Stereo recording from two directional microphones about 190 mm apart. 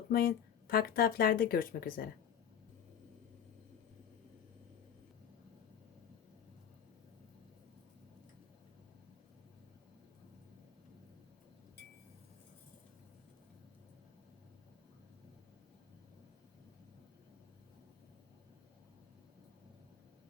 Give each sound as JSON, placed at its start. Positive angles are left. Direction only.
{"t": 0.1, "sound": "speech", "side_deg": 55}